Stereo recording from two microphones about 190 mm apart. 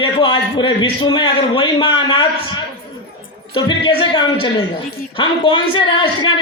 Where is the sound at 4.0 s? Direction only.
25° left (ahead or behind).